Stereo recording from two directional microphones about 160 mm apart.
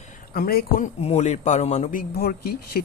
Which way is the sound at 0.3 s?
65° left (ahead or behind).